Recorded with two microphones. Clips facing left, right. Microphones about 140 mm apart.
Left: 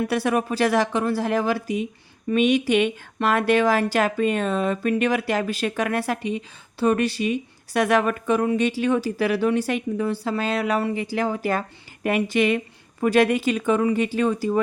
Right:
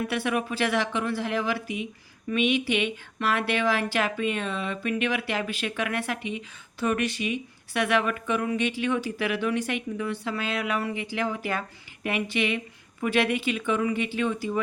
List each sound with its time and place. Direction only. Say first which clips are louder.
0.1 s speech: left 5 dB; 40° left (ahead or behind)